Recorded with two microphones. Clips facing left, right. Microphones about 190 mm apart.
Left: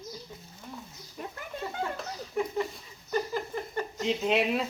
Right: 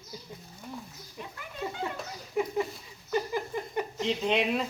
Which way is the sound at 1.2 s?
45° left (ahead or behind).